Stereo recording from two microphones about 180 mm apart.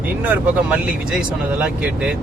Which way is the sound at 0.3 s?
10° right (ahead or behind).